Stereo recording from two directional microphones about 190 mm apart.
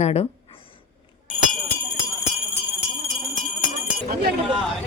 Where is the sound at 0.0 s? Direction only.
35° left (ahead or behind).